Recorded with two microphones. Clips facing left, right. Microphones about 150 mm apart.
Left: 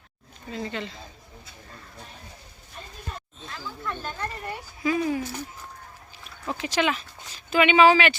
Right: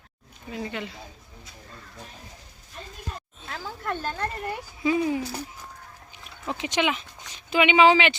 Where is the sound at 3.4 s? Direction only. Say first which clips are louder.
Right 3 dB; 55° right (ahead or behind).